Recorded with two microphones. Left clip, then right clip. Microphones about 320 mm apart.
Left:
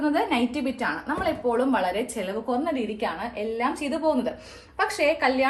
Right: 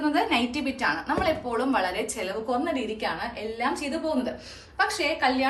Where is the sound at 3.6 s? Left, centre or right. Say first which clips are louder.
Left 2 dB; centre.